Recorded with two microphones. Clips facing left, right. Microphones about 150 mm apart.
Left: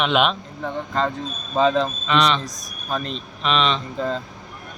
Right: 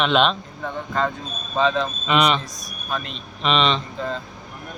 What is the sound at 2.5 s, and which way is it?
Speech, 45° left (ahead or behind).